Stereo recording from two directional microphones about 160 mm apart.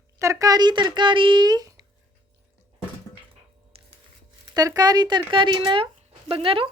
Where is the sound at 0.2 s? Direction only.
20° right (ahead or behind).